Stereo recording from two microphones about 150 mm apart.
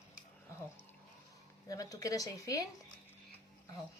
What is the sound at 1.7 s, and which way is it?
Speech, 25° left (ahead or behind).